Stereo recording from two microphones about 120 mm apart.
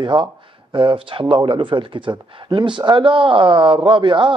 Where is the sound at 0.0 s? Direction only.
40° right (ahead or behind).